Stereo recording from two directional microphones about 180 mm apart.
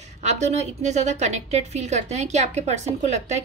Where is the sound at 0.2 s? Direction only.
40° right (ahead or behind).